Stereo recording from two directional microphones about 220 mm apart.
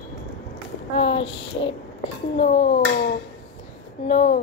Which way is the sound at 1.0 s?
25° left (ahead or behind).